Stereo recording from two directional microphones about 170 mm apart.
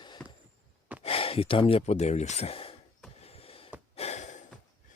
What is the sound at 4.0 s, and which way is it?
Gasp, 40° left (ahead or behind).